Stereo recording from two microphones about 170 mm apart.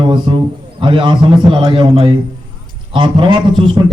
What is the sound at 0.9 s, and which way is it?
A man's voice, 30° right (ahead or behind).